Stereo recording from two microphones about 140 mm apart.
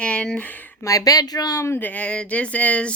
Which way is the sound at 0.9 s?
25° left (ahead or behind).